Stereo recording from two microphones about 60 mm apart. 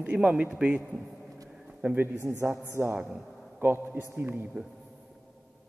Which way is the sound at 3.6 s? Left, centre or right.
Right.